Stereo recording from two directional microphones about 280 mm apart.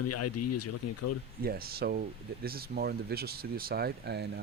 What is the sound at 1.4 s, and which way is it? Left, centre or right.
Speech, right.